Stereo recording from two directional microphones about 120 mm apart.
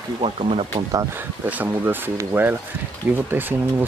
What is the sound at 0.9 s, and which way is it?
Speech, 30° right (ahead or behind).